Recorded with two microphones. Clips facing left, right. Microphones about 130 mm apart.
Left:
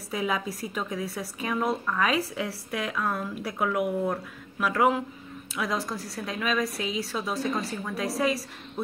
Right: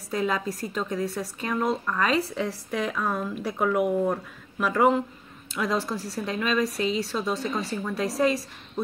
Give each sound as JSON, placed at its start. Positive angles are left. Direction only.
{"t": 0.1, "sound": "a woman's voice", "side_deg": 5}